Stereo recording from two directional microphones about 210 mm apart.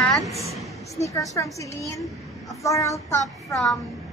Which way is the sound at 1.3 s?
15° left (ahead or behind).